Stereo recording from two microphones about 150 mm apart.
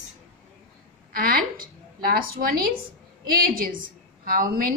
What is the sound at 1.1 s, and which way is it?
A woman's voice, 75° right (ahead or behind).